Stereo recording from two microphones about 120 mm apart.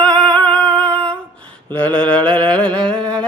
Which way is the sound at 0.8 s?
10° left (ahead or behind).